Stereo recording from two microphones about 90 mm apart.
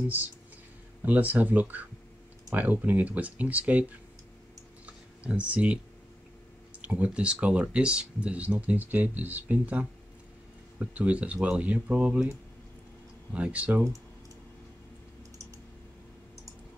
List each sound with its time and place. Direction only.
1.0 s speech: 20° right (ahead or behind)
4.8 s a sound: 15° right (ahead or behind)
6.8 s speech: 15° right (ahead or behind)
11.0 s speech: 15° right (ahead or behind)